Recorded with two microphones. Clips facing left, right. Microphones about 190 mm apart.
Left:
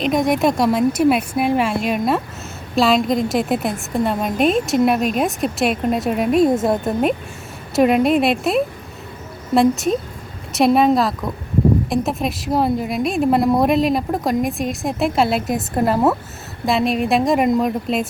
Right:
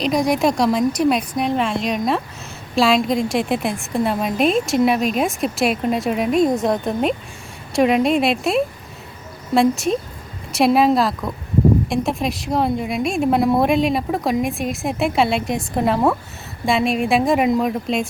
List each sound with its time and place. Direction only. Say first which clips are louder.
0.0 s a woman's voice: left 1 dB; centre (ahead or behind)